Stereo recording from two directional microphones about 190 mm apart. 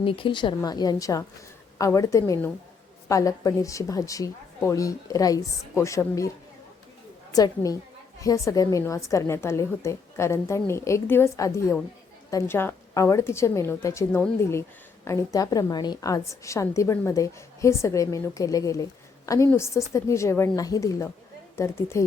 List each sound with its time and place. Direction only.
0.0 s a woman's voice: 30° left (ahead or behind)
7.3 s a woman's voice: 20° left (ahead or behind)